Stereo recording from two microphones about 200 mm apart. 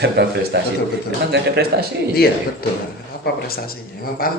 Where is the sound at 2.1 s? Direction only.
50° left (ahead or behind).